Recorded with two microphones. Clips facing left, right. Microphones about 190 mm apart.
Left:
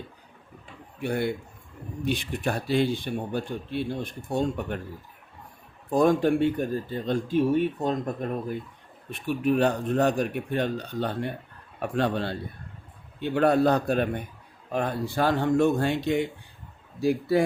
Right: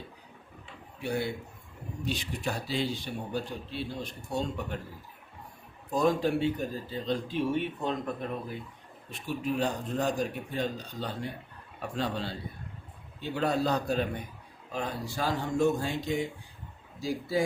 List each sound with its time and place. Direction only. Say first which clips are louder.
1.0 s speech: left 4 dB; 55° left (ahead or behind)
5.9 s speech: left 5 dB; 55° left (ahead or behind)
9.0 s speech: left 7 dB; 60° left (ahead or behind)